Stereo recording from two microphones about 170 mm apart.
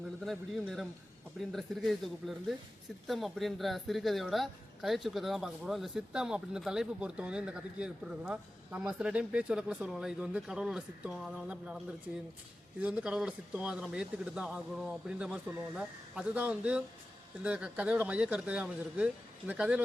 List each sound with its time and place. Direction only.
0.3 s a woman's voice: centre (ahead or behind)